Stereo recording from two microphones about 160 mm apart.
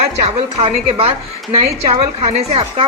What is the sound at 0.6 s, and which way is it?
Speech, 40° right (ahead or behind).